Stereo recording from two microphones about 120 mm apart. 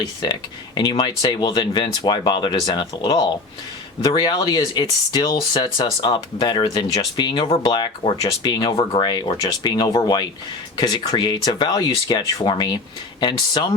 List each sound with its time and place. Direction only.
0.0 s speech: 35° left (ahead or behind)
8.7 s speech: 50° left (ahead or behind)